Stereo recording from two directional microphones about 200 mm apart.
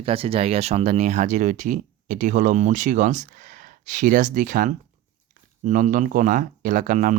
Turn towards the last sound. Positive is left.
turn(degrees=-40)  # may be behind; listen again after turning